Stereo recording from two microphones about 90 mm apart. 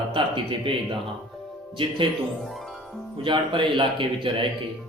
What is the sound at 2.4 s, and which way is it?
Music, centre (ahead or behind).